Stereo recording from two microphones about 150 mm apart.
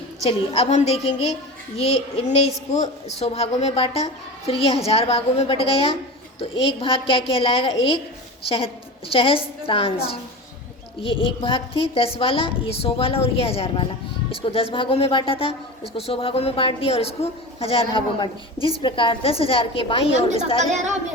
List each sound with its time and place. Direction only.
0.3 s speech: 40° left (ahead or behind)